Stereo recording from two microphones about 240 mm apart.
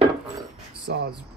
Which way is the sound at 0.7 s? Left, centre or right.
Right.